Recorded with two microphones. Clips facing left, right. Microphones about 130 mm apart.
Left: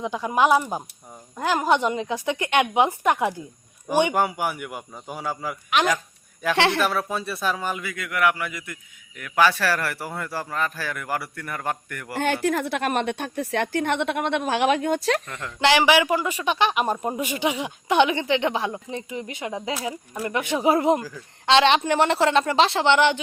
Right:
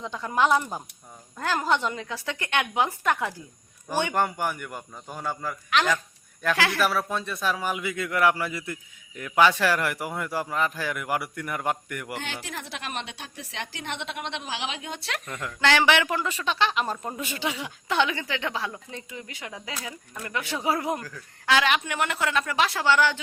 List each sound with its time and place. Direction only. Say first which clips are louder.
0.0 s a woman's voice: left 3 dB; 15° left (ahead or behind)
6.6 s a woman's voice: left 6 dB; 25° left (ahead or behind)
6.8 s speech: left 1 dB; centre (ahead or behind)
7.7 s a man's voice: right 1 dB; 20° right (ahead or behind)
12.2 s a woman's voice: left 13 dB; 55° left (ahead or behind)
15.4 s a woman's voice: left 3 dB; 15° left (ahead or behind)